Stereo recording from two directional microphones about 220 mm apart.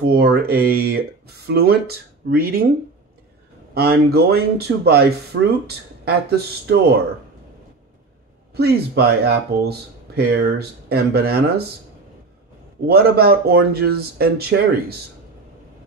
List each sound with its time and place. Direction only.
0.0 s speech: 50° right (ahead or behind)
3.7 s speech: 45° right (ahead or behind)
8.5 s speech: 45° right (ahead or behind)
12.8 s speech: 45° right (ahead or behind)